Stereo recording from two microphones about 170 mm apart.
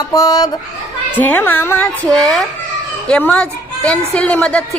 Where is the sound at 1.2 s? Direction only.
10° left (ahead or behind).